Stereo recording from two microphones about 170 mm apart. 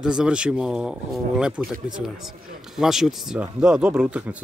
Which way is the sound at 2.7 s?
Centre (ahead or behind).